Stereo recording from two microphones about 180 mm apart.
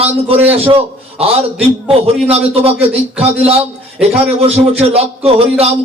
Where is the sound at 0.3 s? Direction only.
30° right (ahead or behind).